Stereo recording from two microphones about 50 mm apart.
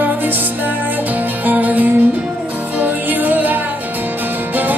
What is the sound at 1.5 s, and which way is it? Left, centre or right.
Music, right.